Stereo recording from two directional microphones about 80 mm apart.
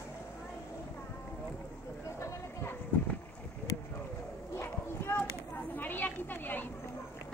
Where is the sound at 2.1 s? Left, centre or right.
Left.